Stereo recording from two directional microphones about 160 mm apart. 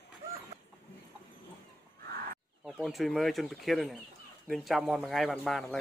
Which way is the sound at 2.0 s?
70° right (ahead or behind).